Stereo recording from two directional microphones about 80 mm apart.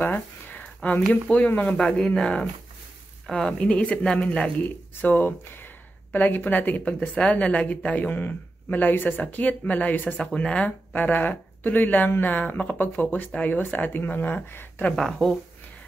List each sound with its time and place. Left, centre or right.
0.0 s a sound: left
1.3 s speech: centre
1.8 s speech: centre
15.0 s speech: centre